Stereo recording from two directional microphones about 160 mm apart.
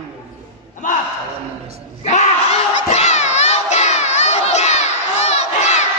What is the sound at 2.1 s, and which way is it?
Crowd, 45° left (ahead or behind).